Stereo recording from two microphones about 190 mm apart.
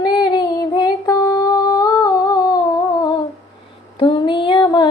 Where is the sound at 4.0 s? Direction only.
25° left (ahead or behind).